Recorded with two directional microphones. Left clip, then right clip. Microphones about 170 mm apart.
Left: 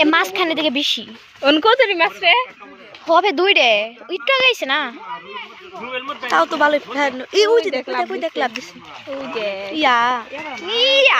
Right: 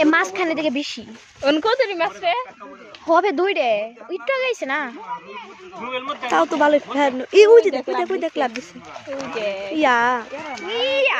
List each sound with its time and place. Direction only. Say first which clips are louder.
0.0 s a woman's voice: left 2 dB; 15° right (ahead or behind)
1.4 s speech: left 5 dB; 30° left (ahead or behind)
3.1 s speech: left 2 dB; 20° right (ahead or behind)
3.3 s a woman's voice: left 5 dB; centre (ahead or behind)
6.3 s speech: left 1 dB; 45° right (ahead or behind)
9.4 s speech: left 1 dB; 45° left (ahead or behind)
9.7 s speech: left 2 dB; 40° right (ahead or behind)
10.7 s a woman's voice: left 6 dB; centre (ahead or behind)